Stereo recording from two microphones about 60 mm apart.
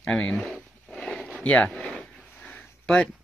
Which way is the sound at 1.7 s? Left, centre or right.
Centre.